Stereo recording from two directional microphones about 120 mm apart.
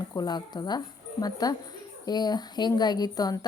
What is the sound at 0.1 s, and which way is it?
A woman's voice, 35° left (ahead or behind).